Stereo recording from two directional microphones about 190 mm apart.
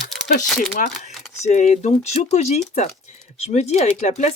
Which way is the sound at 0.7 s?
40° left (ahead or behind).